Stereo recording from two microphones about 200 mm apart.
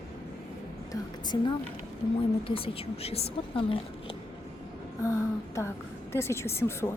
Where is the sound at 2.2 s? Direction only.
25° left (ahead or behind).